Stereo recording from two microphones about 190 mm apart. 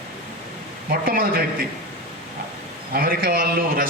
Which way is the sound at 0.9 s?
50° right (ahead or behind).